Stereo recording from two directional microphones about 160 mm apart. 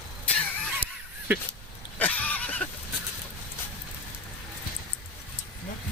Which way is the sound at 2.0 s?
10° left (ahead or behind).